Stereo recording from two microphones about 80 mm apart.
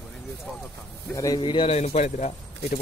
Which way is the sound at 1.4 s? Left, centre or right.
Left.